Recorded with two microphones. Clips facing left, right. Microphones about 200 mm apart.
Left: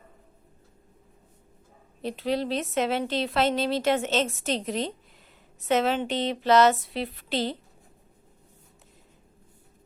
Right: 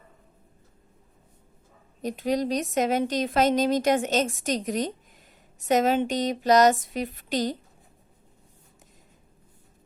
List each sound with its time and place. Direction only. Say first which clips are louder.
2.0 s speech: right 2 dB; 45° right (ahead or behind)
3.8 s a woman's voice: right 2 dB; 15° right (ahead or behind)
4.0 s speech: right 1 dB; 45° right (ahead or behind)